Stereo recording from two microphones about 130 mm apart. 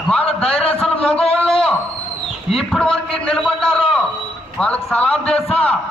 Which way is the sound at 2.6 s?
5° left (ahead or behind).